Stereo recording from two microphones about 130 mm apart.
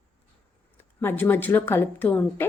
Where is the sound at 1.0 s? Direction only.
15° left (ahead or behind).